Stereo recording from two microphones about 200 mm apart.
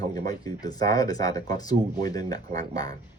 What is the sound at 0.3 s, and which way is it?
Speech, 20° left (ahead or behind).